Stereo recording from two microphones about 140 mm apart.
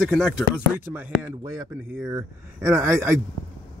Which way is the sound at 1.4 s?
25° right (ahead or behind).